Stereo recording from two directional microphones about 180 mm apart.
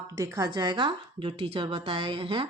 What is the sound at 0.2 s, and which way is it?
Speech, 20° right (ahead or behind).